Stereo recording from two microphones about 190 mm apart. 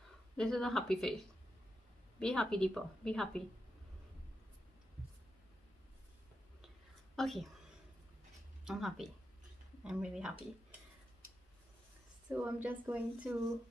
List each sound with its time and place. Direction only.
0.4 s a woman's voice: centre (ahead or behind)
7.2 s speech: centre (ahead or behind)
8.6 s a woman's voice: centre (ahead or behind)
12.3 s speech: 10° right (ahead or behind)